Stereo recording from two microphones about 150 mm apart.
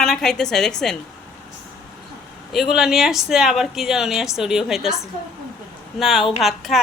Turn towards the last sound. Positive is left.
turn(degrees=0)  # may be behind; listen again after turning